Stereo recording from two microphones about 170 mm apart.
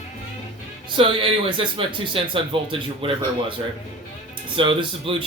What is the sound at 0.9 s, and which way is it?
Speech, 30° right (ahead or behind).